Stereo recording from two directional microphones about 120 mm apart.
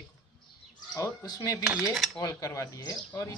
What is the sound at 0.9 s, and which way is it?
Speech, 25° left (ahead or behind).